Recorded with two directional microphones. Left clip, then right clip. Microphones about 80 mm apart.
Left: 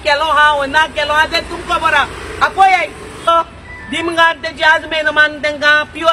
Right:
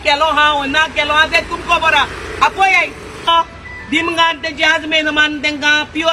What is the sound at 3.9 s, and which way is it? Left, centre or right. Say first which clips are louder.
Speech: left 1 dB; left.